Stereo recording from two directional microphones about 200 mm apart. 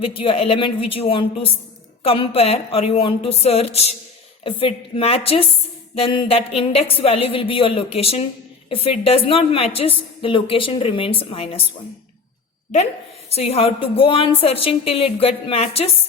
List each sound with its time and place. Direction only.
0.0 s a woman's voice: 25° left (ahead or behind)
13.3 s a woman's voice: 30° left (ahead or behind)